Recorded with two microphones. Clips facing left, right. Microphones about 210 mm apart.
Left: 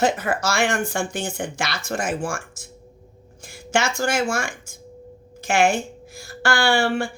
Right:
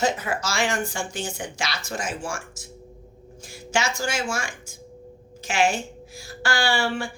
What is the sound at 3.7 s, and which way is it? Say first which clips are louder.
A woman's voice: left 4 dB; 55° left (ahead or behind).